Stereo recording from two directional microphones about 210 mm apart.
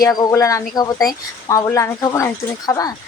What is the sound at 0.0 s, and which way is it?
Speech, 15° left (ahead or behind).